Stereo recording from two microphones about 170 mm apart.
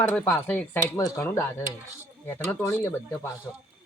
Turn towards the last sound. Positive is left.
turn(degrees=15)  # may be behind; listen again after turning